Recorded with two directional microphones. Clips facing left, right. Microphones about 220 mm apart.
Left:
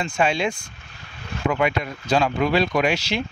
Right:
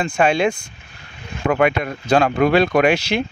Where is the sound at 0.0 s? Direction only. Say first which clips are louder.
Right 5 dB; 55° right (ahead or behind).